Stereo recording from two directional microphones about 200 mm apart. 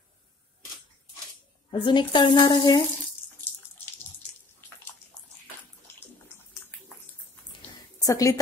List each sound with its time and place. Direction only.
1.7 s speech: 25° left (ahead or behind)
8.0 s a woman's voice: 15° left (ahead or behind)